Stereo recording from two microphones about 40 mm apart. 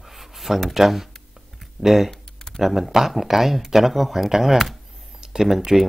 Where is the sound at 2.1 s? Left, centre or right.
Centre.